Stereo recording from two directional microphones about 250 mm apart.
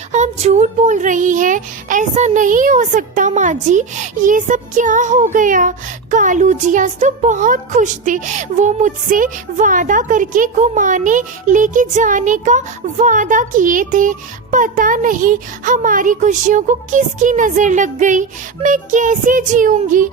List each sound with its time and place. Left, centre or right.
0.1 s speech: right